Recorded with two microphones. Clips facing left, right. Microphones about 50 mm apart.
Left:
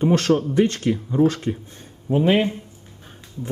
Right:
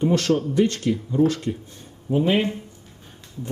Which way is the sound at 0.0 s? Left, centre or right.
Left.